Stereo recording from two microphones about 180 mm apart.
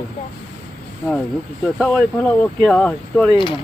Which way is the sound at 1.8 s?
5° left (ahead or behind).